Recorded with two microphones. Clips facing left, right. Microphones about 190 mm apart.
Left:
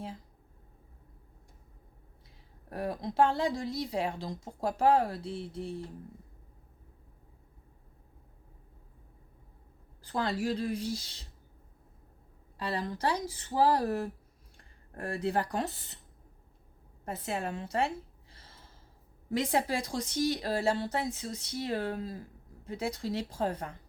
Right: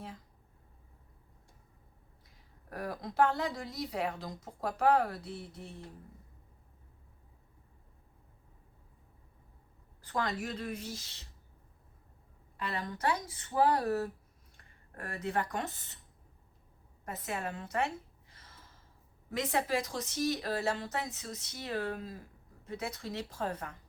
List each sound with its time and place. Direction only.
2.6 s a woman's voice: 25° left (ahead or behind)
10.0 s speech: 30° left (ahead or behind)
12.5 s speech: 35° left (ahead or behind)
17.1 s a sound: 30° left (ahead or behind)
19.3 s speech: 30° left (ahead or behind)